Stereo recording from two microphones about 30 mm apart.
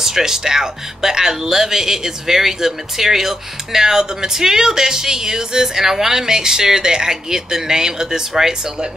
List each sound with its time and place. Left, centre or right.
0.0 s speech: centre